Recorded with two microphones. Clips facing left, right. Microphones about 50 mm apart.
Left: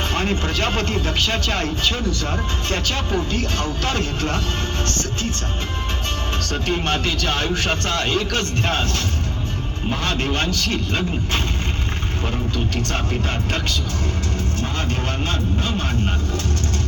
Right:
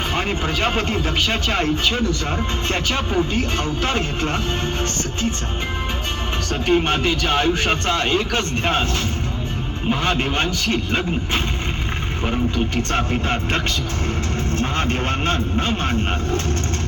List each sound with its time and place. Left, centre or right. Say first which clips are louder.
0.1 s a man's voice: even; centre
6.5 s a man's voice: right 5 dB; centre
9.9 s a man's voice: right 3 dB; centre
12.2 s a man's voice: right 4 dB; right
14.6 s speech: right 5 dB; right